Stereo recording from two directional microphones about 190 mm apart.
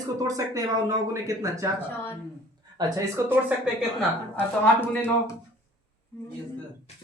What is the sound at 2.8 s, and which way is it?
Speech, 15° right (ahead or behind).